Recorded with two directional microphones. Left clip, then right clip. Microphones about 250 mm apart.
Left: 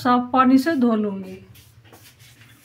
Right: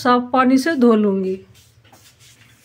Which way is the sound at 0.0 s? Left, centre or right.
Right.